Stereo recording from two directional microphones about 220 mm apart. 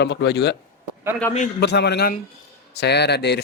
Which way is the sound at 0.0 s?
50° left (ahead or behind).